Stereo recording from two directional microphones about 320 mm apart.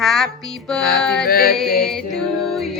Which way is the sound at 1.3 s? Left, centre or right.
Left.